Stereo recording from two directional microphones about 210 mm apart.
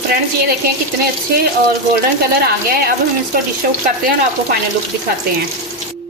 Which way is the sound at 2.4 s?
45° right (ahead or behind).